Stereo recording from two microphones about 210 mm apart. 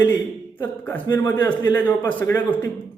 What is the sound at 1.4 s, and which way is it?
Speech, 20° left (ahead or behind).